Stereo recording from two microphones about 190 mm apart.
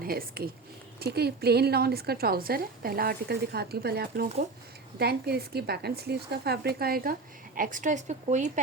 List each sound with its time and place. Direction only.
0.0 s speech: 50° right (ahead or behind)